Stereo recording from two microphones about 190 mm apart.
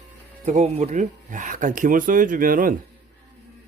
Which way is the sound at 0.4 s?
35° right (ahead or behind).